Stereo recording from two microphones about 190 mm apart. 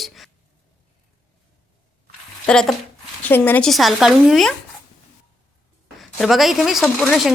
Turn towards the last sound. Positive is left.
turn(degrees=0)  # may be behind; listen again after turning